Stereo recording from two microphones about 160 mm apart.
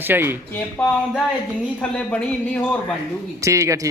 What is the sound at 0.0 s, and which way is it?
Speech, 15° right (ahead or behind).